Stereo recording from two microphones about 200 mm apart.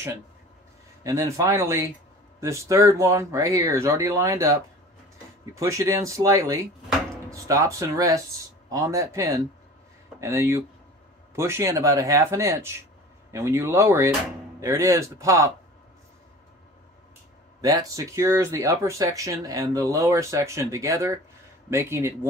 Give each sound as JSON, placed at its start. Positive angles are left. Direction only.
{"t": 1.0, "sound": "speech", "side_deg": -15}
{"t": 17.6, "sound": "speech", "side_deg": -20}